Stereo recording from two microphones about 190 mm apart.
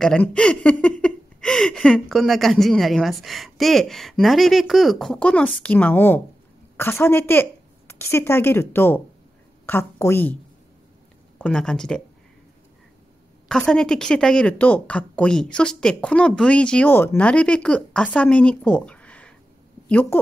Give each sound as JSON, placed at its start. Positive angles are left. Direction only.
{"t": 0.0, "sound": "a woman's voice", "side_deg": 5}
{"t": 11.3, "sound": "speech", "side_deg": 5}
{"t": 13.5, "sound": "a woman's voice", "side_deg": 5}